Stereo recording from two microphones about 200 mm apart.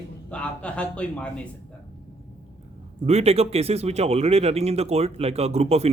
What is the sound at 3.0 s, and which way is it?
Speech, 30° right (ahead or behind).